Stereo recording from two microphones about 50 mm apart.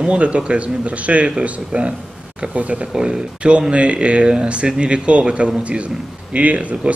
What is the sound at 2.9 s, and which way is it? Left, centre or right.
Speech, centre.